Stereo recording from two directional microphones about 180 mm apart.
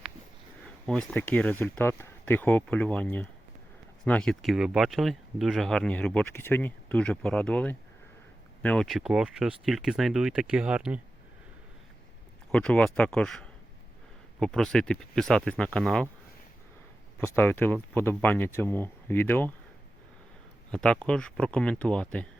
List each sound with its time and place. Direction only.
0.9 s speech: 5° left (ahead or behind)
12.5 s speech: 5° left (ahead or behind)
17.2 s speech: 10° left (ahead or behind)
20.7 s speech: 5° left (ahead or behind)